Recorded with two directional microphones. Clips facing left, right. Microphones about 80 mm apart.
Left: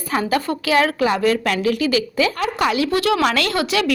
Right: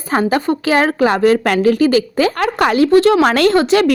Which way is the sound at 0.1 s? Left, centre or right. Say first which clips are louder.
Right 5 dB; right.